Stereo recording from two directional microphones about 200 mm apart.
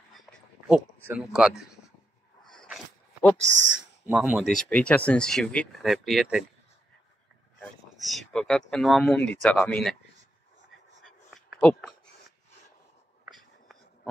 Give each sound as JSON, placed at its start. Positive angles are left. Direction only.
{"t": 0.1, "sound": "a sound", "side_deg": -5}
{"t": 1.0, "sound": "speech", "side_deg": -5}
{"t": 2.4, "sound": "zipper", "side_deg": 0}
{"t": 3.4, "sound": "speech", "side_deg": -65}
{"t": 4.1, "sound": "speech", "side_deg": -5}
{"t": 7.6, "sound": "speech", "side_deg": 0}
{"t": 11.0, "sound": "a sound", "side_deg": 0}
{"t": 13.2, "sound": "whispering", "side_deg": 0}